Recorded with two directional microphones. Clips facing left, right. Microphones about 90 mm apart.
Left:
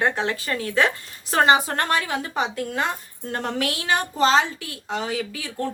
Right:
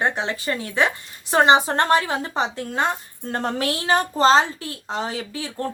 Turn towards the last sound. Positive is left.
turn(degrees=-30)  # may be behind; listen again after turning